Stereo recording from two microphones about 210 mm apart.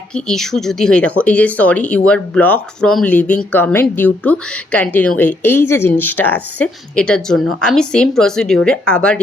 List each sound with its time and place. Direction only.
0.1 s speech: centre (ahead or behind)